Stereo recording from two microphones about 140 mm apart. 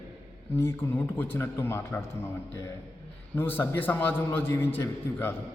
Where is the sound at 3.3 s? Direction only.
15° left (ahead or behind).